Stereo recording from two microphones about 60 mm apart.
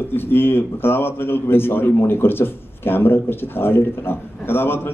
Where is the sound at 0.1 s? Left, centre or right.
Left.